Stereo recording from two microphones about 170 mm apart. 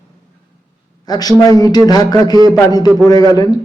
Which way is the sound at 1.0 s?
25° left (ahead or behind).